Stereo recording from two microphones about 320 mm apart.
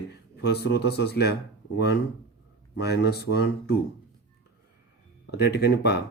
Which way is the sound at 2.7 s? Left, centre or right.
Left.